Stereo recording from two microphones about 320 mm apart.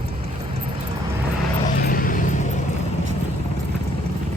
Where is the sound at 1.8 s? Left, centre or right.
Left.